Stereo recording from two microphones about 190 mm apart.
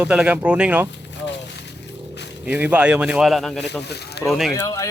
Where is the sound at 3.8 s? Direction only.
60° left (ahead or behind).